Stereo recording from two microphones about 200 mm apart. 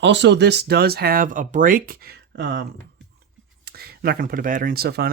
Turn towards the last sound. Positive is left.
turn(degrees=-50)  # may be behind; listen again after turning